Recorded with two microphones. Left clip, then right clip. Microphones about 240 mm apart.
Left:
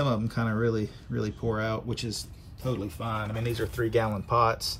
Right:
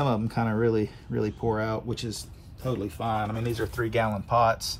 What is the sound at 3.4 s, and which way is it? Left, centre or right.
Speech, centre.